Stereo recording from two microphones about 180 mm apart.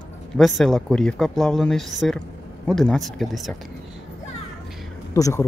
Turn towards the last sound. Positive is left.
turn(degrees=15)  # may be behind; listen again after turning